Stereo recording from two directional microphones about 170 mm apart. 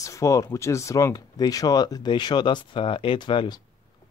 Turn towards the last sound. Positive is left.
turn(degrees=25)  # may be behind; listen again after turning